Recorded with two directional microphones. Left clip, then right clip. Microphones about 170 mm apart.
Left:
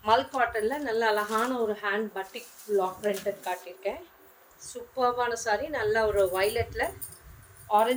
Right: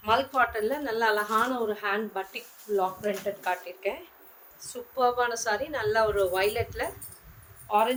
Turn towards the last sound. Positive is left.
turn(degrees=-20)  # may be behind; listen again after turning